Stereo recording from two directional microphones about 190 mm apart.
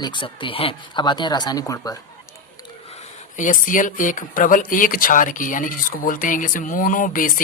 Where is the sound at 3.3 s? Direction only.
45° left (ahead or behind).